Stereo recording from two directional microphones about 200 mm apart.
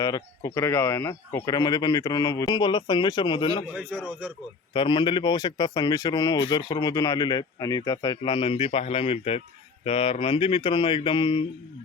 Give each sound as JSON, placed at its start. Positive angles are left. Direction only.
{"t": 0.0, "sound": "speech", "side_deg": 15}
{"t": 3.8, "sound": "speech", "side_deg": -10}
{"t": 4.7, "sound": "speech", "side_deg": 25}